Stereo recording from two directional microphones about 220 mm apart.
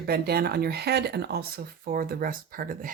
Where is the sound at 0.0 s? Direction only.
45° right (ahead or behind).